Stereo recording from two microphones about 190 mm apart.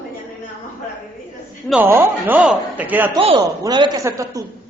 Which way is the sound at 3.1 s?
25° right (ahead or behind).